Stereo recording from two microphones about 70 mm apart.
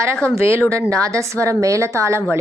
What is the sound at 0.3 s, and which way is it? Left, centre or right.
A woman's voice, right.